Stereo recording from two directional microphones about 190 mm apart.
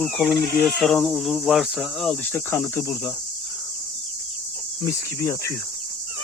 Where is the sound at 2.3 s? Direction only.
15° left (ahead or behind).